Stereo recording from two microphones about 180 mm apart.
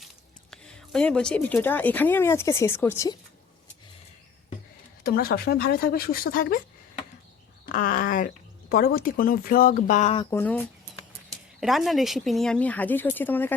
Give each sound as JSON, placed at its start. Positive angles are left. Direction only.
{"t": 0.5, "sound": "speech", "side_deg": 5}
{"t": 5.0, "sound": "speech", "side_deg": 55}
{"t": 7.7, "sound": "speech", "side_deg": 55}
{"t": 10.2, "sound": "speech", "side_deg": 10}
{"t": 11.3, "sound": "speech", "side_deg": 0}